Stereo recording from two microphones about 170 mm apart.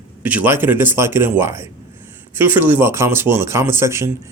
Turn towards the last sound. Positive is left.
turn(degrees=-15)  # may be behind; listen again after turning